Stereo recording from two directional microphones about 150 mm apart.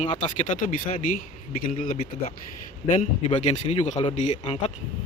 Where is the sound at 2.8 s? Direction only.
55° left (ahead or behind).